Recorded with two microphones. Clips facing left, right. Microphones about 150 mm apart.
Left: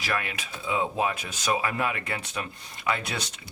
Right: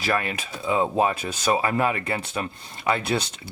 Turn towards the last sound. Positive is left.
turn(degrees=-30)  # may be behind; listen again after turning